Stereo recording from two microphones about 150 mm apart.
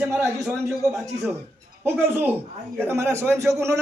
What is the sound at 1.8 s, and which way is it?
A man's voice, 15° right (ahead or behind).